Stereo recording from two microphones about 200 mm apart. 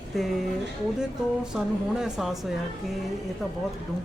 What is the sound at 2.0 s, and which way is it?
Speech, 5° right (ahead or behind).